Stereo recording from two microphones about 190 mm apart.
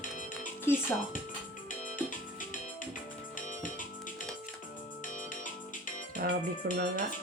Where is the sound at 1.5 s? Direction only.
45° left (ahead or behind).